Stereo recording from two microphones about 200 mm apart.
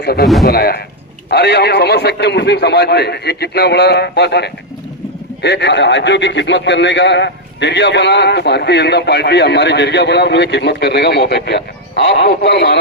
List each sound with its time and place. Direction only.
0.0 s a man's voice: 50° left (ahead or behind)